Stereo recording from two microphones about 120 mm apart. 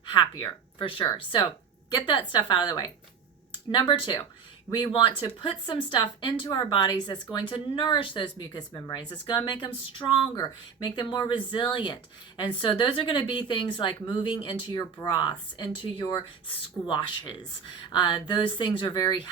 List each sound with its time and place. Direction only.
0.0 s speech: 40° left (ahead or behind)